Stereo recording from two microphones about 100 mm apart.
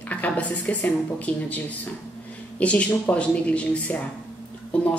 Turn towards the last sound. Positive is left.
turn(degrees=10)  # may be behind; listen again after turning